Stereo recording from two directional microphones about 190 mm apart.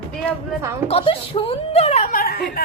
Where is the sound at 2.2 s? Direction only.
55° left (ahead or behind).